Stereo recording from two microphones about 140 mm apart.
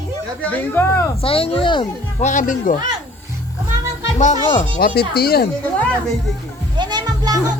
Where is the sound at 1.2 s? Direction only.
40° left (ahead or behind).